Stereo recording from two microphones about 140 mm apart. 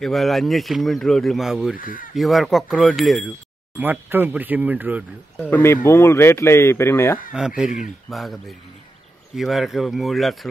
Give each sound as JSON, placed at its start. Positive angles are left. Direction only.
{"t": 0.0, "sound": "speech", "side_deg": 0}
{"t": 1.8, "sound": "speech", "side_deg": 75}
{"t": 2.1, "sound": "speech", "side_deg": 0}
{"t": 3.7, "sound": "speech", "side_deg": -15}
{"t": 5.5, "sound": "speech", "side_deg": 20}
{"t": 7.3, "sound": "speech", "side_deg": -5}